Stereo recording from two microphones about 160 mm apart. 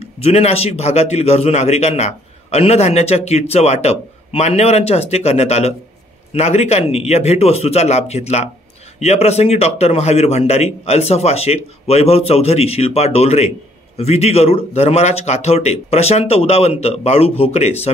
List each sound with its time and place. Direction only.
0.2 s a man's voice: 40° left (ahead or behind)